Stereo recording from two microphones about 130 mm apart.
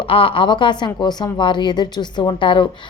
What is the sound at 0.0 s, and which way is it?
Speech, 45° left (ahead or behind).